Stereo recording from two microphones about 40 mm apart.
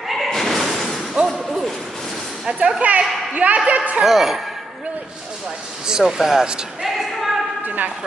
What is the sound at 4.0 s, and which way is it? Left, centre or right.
Speech, centre.